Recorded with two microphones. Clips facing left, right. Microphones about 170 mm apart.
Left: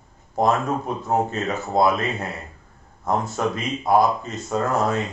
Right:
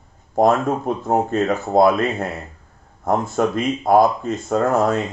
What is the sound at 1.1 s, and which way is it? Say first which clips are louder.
Speech: right 5 dB; 50° right (ahead or behind).